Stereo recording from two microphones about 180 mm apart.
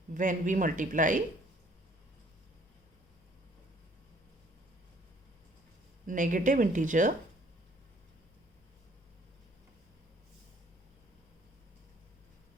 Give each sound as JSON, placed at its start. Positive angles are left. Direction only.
{"t": 0.1, "sound": "speech", "side_deg": -45}
{"t": 6.1, "sound": "speech", "side_deg": -45}